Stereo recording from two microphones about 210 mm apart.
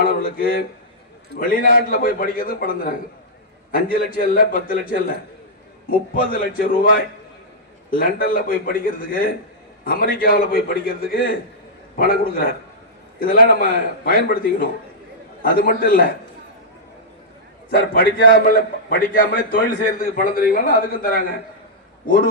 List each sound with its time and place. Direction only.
0.0 s a man's voice: 45° left (ahead or behind)
17.7 s a man's voice: 45° left (ahead or behind)